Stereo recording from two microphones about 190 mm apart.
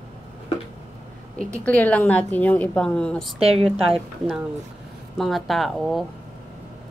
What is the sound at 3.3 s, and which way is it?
Speech, 30° right (ahead or behind).